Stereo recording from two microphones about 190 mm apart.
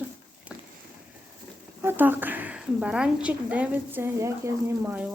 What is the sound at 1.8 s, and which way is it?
A woman's voice, 10° right (ahead or behind).